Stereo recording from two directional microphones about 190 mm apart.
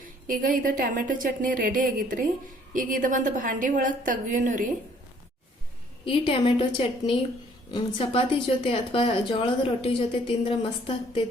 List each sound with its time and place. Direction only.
0.0 s a woman's voice: 45° right (ahead or behind)
6.1 s a woman's voice: 30° left (ahead or behind)